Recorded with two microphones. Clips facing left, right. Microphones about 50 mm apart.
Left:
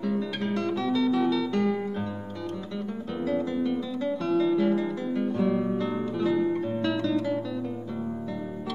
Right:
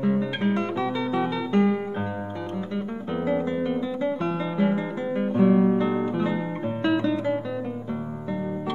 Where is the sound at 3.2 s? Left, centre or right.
Right.